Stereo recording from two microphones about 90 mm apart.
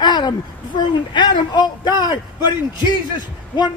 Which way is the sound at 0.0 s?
55° left (ahead or behind).